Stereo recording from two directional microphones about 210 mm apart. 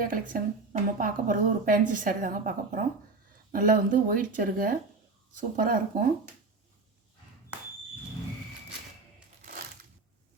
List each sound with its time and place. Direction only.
0.3 s a woman's voice: 40° right (ahead or behind)